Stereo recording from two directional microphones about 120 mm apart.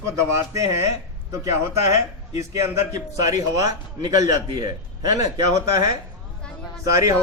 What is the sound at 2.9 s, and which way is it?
A man's voice, 30° right (ahead or behind).